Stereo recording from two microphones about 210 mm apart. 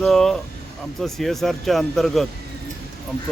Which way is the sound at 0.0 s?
Centre (ahead or behind).